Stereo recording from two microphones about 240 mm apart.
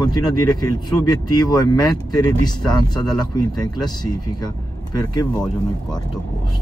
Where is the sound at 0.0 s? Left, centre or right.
Centre.